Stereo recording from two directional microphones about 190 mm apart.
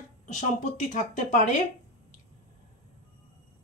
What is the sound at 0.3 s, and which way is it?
A woman's voice, 40° left (ahead or behind).